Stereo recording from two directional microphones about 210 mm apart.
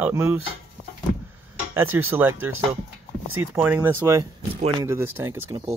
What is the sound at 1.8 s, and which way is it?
Speech, 10° right (ahead or behind).